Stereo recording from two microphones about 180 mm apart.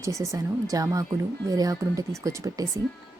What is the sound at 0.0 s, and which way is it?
Speech, 15° right (ahead or behind).